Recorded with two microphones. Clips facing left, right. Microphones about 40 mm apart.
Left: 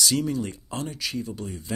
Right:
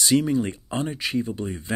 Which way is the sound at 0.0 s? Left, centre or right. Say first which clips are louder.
Right 4 dB; right.